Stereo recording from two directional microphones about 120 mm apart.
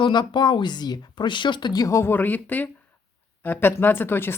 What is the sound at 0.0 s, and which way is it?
Speech, 40° left (ahead or behind).